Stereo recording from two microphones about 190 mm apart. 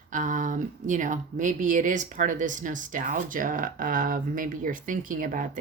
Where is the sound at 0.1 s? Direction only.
45° right (ahead or behind).